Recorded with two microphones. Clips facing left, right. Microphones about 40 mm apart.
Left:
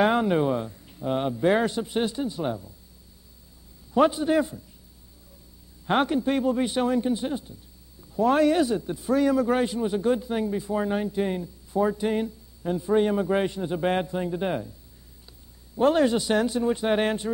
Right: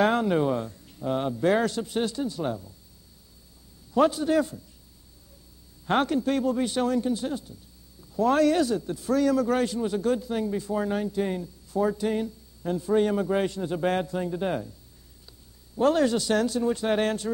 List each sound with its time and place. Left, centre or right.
0.0 s speech: centre
3.9 s a man's voice: centre
5.9 s a man's voice: centre
15.7 s a man's voice: centre